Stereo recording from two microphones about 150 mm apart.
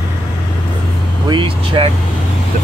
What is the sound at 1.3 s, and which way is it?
Speech, 35° right (ahead or behind).